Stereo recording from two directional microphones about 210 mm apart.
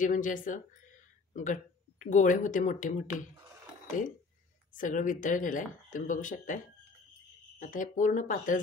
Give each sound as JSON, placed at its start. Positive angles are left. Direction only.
{"t": 0.0, "sound": "speech", "side_deg": 40}
{"t": 4.7, "sound": "speech", "side_deg": 40}